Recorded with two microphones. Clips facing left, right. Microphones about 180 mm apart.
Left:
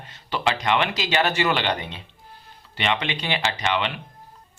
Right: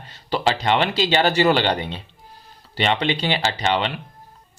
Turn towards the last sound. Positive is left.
turn(degrees=-35)  # may be behind; listen again after turning